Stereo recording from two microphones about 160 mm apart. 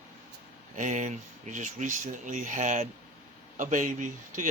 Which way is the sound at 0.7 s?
50° right (ahead or behind).